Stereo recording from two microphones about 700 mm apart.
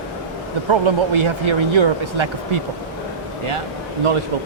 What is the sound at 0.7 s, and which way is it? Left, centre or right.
Speech, right.